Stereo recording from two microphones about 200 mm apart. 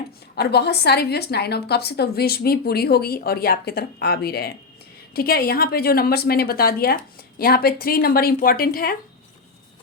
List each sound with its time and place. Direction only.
0.3 s a woman's voice: 55° left (ahead or behind)